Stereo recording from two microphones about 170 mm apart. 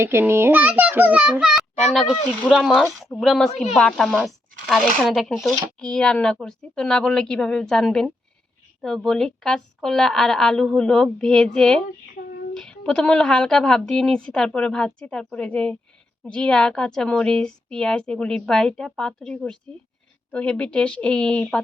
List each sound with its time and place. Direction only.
0.0 s a child's voice: 15° right (ahead or behind); by 21.6 s 5° left (ahead or behind)